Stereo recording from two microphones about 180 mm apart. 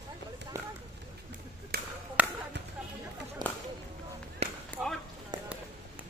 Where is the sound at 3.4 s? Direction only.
25° right (ahead or behind).